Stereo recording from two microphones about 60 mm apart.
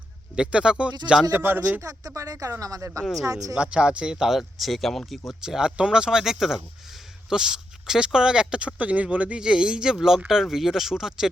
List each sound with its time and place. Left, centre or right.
0.3 s speech: centre
1.4 s a man's voice: right
1.8 s speech: right
3.5 s speech: centre
5.4 s speech: centre